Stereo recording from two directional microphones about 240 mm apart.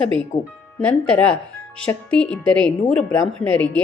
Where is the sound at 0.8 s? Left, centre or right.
Centre.